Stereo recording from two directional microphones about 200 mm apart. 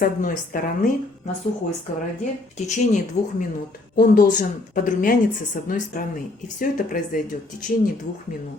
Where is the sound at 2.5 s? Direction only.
35° left (ahead or behind).